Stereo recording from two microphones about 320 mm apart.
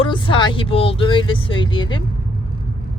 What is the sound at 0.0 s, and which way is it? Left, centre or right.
Speech, centre.